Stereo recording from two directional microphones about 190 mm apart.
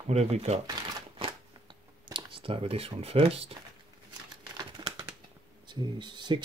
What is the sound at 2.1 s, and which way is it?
Speech, 30° right (ahead or behind).